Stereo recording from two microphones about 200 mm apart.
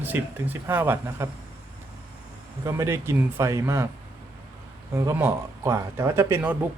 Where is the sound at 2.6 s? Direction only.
15° right (ahead or behind).